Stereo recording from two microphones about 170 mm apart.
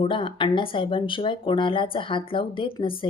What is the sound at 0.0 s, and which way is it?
A woman's voice, 30° left (ahead or behind).